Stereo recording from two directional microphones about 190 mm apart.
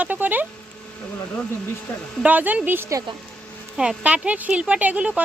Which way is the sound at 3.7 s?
5° right (ahead or behind).